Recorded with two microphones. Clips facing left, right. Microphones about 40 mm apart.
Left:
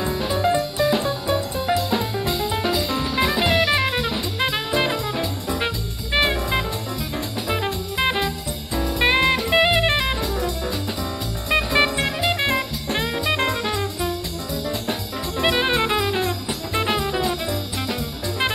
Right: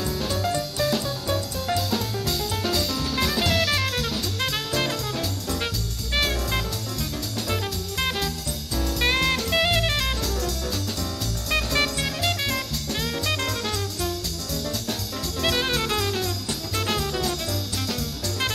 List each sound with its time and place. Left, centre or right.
0.0 s music: left
8.7 s drum kit: left
11.5 s music: left